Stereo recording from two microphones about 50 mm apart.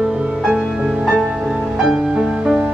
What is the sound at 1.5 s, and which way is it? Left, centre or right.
Music, centre.